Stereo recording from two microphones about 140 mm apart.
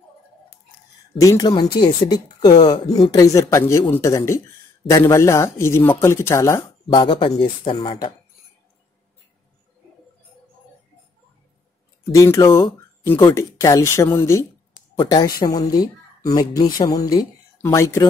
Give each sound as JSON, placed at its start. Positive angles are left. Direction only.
{"t": 1.2, "sound": "speech", "side_deg": 25}
{"t": 12.1, "sound": "speech", "side_deg": 20}